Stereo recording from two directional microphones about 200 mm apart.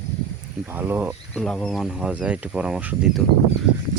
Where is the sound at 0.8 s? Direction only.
5° right (ahead or behind).